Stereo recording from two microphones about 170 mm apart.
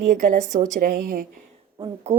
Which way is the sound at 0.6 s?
55° right (ahead or behind).